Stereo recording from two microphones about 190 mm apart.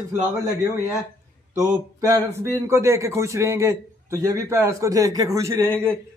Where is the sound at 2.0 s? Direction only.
15° right (ahead or behind).